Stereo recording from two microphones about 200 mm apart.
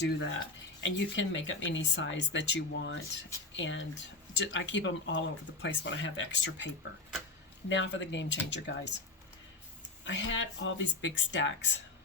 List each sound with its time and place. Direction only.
0.0 s speech: 60° left (ahead or behind)
7.7 s speech: 65° left (ahead or behind)
10.0 s speech: 65° left (ahead or behind)